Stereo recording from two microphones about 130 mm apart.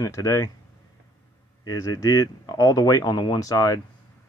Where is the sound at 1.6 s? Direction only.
30° left (ahead or behind).